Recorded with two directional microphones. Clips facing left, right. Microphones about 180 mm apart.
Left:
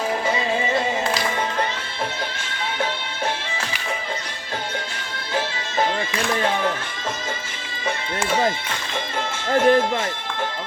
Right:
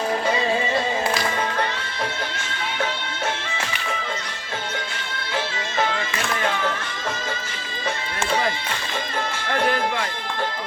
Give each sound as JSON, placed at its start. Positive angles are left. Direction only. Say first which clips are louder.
{"t": 9.5, "sound": "speech", "louder": "left 6 dB", "side_deg": 25}